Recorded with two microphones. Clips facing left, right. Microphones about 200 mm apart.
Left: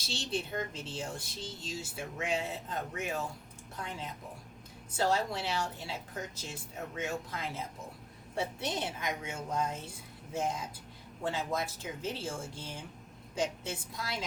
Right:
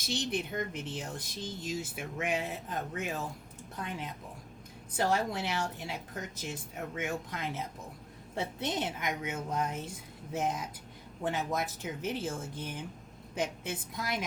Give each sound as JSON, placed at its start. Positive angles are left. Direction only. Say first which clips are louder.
{"t": 0.0, "sound": "speech", "louder": "right 3 dB", "side_deg": -15}
{"t": 13.9, "sound": "speech", "louder": "right 5 dB", "side_deg": -20}